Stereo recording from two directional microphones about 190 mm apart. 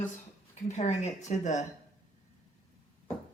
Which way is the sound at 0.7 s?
40° left (ahead or behind).